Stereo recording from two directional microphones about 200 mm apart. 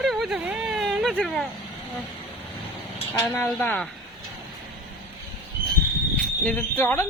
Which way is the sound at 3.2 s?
10° left (ahead or behind).